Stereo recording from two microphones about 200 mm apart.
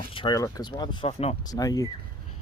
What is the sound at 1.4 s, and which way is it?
Speech, 20° left (ahead or behind).